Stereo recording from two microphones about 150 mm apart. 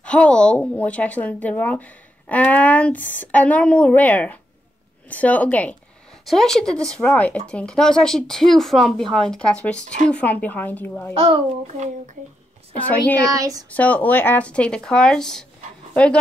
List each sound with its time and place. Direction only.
0.0 s speech: 5° left (ahead or behind)
11.1 s a child's voice: 40° right (ahead or behind)
12.9 s speech: 10° left (ahead or behind)
13.3 s speech: 25° right (ahead or behind)
13.7 s speech: 10° left (ahead or behind)